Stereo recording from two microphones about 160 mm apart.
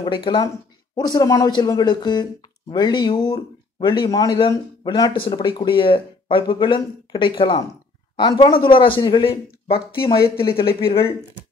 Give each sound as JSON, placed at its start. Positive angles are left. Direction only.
{"t": 0.0, "sound": "speech", "side_deg": 30}
{"t": 10.2, "sound": "speech", "side_deg": 70}